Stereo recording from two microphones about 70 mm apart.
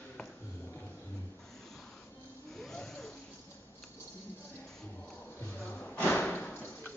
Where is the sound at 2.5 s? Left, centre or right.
Centre.